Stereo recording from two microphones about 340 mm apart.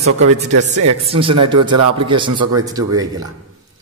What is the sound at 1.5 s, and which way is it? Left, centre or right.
Speech, right.